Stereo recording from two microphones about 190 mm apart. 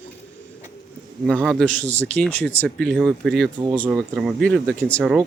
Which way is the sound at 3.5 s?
25° right (ahead or behind).